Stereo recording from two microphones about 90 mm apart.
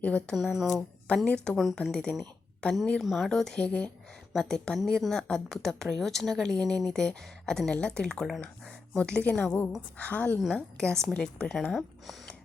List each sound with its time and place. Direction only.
0.0 s a woman's voice: 15° left (ahead or behind)
0.3 s speech: 5° right (ahead or behind)
0.8 s a woman's voice: 10° left (ahead or behind)
3.0 s a woman's voice: centre (ahead or behind)